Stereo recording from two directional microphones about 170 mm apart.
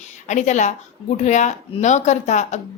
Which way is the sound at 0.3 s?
45° left (ahead or behind).